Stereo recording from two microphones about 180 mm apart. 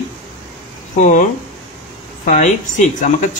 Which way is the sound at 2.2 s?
45° left (ahead or behind).